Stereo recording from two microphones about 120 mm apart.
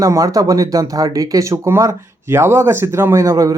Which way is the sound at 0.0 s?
30° right (ahead or behind).